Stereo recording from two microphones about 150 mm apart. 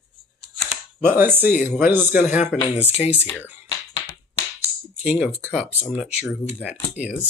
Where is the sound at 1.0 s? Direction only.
15° right (ahead or behind).